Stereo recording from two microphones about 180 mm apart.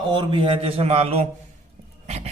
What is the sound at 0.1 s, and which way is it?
A man's voice, 30° right (ahead or behind).